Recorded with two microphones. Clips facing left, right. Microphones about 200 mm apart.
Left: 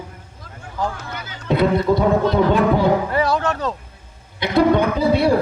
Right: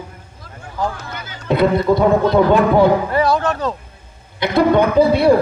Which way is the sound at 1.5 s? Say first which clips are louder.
Right 2 dB; 55° right (ahead or behind).